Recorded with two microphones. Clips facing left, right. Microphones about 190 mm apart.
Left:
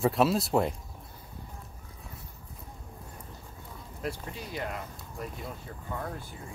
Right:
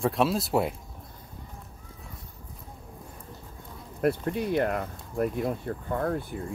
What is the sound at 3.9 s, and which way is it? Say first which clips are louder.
Speech: right 11 dB; 60° right (ahead or behind).